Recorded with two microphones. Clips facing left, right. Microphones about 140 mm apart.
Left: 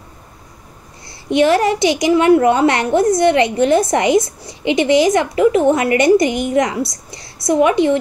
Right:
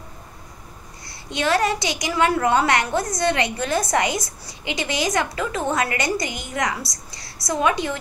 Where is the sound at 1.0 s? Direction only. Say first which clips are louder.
Left 10 dB; 25° left (ahead or behind).